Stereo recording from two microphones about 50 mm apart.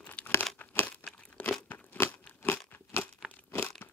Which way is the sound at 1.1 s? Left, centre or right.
Left.